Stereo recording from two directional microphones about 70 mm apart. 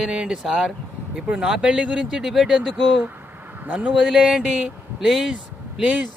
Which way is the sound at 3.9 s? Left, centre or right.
Centre.